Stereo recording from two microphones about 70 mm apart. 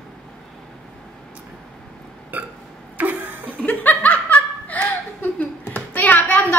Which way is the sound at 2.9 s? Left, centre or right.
Right.